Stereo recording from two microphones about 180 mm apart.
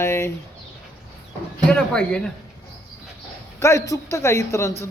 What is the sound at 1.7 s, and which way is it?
Speech, 5° left (ahead or behind).